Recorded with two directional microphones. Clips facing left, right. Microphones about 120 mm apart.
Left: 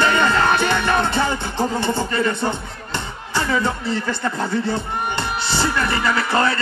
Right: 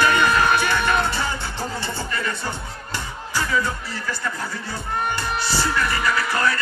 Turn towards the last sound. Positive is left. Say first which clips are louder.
# left 3 dB
turn(degrees=25)  # may be behind; listen again after turning